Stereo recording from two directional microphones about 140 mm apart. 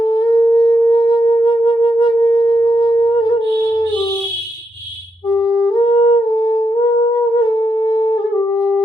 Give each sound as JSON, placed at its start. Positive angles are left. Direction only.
{"t": 0.0, "sound": "music", "side_deg": 30}
{"t": 5.4, "sound": "music", "side_deg": 35}